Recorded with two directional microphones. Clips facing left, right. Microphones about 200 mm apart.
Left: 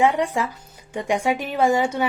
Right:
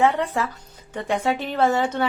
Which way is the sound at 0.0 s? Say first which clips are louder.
Left 1 dB; 15° left (ahead or behind).